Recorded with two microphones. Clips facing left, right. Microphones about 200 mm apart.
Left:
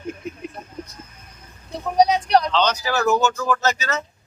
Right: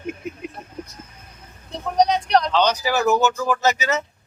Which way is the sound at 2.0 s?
5° left (ahead or behind).